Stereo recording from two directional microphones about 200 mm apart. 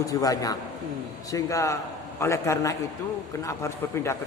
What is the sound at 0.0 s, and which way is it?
A man's voice, 15° left (ahead or behind).